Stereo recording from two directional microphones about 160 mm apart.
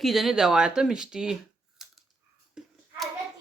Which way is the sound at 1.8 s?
5° right (ahead or behind).